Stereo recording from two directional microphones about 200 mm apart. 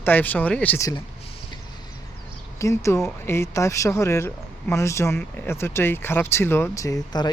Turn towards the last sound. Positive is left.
turn(degrees=20)  # may be behind; listen again after turning